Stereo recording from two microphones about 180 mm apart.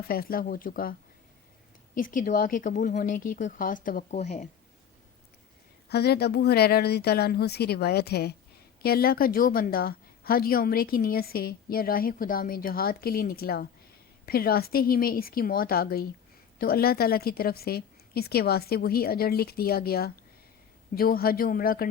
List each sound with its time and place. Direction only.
0.1 s speech: 55° left (ahead or behind)
2.0 s speech: 50° left (ahead or behind)
5.9 s a woman's voice: 65° left (ahead or behind)